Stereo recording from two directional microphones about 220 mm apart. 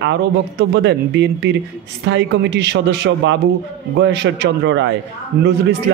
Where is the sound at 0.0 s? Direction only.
55° right (ahead or behind).